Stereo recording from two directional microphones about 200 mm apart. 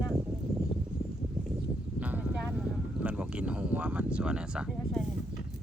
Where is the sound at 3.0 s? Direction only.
5° right (ahead or behind).